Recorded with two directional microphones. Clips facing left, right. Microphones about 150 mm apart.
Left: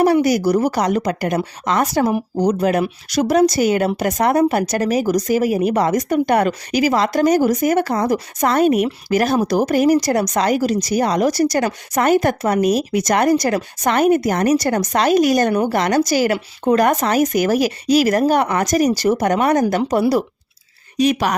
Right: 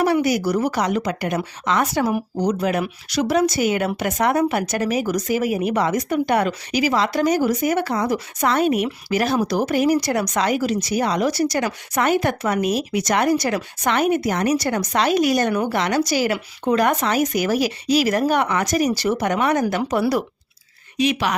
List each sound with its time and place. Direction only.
0.0 s a woman's voice: 40° left (ahead or behind)